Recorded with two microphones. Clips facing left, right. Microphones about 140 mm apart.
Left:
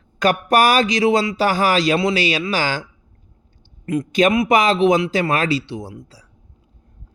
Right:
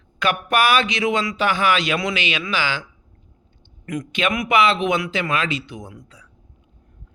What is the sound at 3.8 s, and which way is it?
A man's voice, 30° left (ahead or behind).